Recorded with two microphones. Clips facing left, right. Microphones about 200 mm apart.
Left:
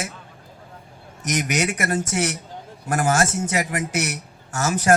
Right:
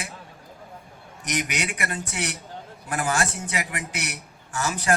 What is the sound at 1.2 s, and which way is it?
A man's voice, 45° left (ahead or behind).